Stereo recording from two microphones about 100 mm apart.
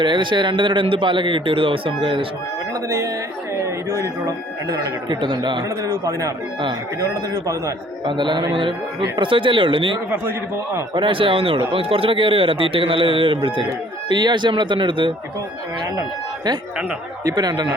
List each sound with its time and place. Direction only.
0.0 s speech: 55° right (ahead or behind)
3.5 s a sound: 30° right (ahead or behind)
4.7 s speech: 35° right (ahead or behind)
5.2 s a man's voice: 50° right (ahead or behind)
5.6 s speech: 30° right (ahead or behind)
8.0 s a man's voice: 55° right (ahead or behind)
14.1 s a man's voice: 50° right (ahead or behind)
17.2 s a man's voice: 40° right (ahead or behind)